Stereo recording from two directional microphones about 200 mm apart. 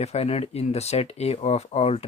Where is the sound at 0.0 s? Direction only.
30° left (ahead or behind).